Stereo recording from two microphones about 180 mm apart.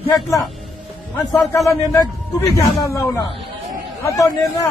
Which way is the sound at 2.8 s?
15° left (ahead or behind).